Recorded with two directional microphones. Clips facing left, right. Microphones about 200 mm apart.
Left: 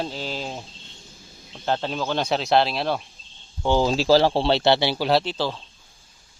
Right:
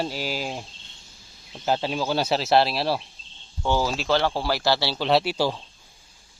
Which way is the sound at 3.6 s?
20° left (ahead or behind).